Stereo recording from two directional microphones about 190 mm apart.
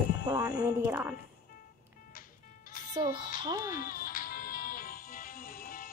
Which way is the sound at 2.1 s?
50° left (ahead or behind).